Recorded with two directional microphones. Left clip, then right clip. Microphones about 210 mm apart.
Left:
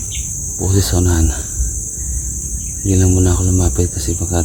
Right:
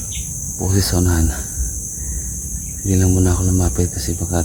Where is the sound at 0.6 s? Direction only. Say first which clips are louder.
Left 2 dB; 5° right (ahead or behind).